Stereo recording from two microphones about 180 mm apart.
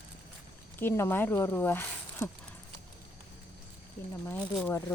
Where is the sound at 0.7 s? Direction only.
10° left (ahead or behind).